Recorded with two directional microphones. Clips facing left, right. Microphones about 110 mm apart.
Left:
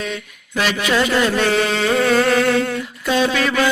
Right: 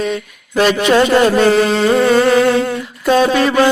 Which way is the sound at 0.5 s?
40° right (ahead or behind).